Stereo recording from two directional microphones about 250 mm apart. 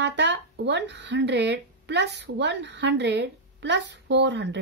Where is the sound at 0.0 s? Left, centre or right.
Right.